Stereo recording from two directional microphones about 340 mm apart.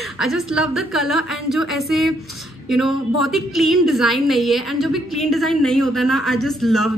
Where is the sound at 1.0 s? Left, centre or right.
Left.